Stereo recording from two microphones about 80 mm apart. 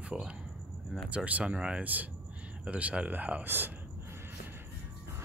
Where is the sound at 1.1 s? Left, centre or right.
Centre.